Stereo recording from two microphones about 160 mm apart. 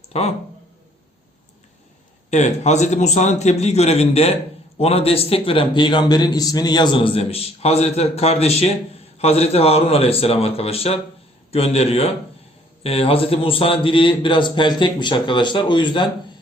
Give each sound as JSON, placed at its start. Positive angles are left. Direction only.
{"t": 0.1, "sound": "speech", "side_deg": 40}
{"t": 2.3, "sound": "a man's voice", "side_deg": 45}